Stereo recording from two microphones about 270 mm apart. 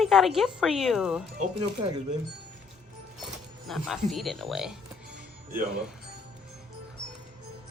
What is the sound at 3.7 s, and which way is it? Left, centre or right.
Speech, centre.